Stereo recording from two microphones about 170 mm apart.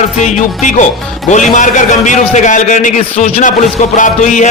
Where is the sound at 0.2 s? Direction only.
45° left (ahead or behind).